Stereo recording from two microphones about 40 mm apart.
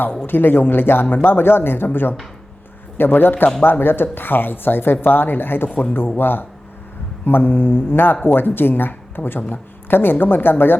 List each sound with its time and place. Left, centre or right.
0.3 s speech: left